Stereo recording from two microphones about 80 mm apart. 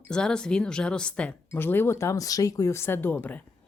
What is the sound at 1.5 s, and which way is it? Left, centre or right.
Speech, left.